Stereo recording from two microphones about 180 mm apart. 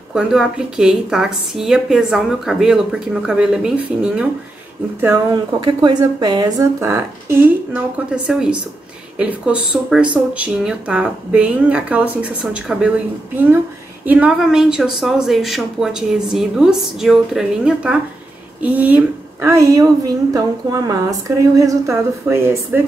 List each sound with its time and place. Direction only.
0.1 s a woman's voice: 5° right (ahead or behind)
5.0 s a woman's voice: 20° right (ahead or behind)
14.0 s a woman's voice: 10° right (ahead or behind)